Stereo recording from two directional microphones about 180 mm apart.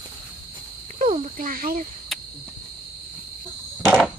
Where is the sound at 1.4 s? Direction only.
50° right (ahead or behind).